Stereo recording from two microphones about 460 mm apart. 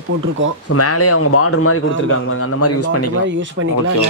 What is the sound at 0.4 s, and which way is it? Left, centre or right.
Speech, right.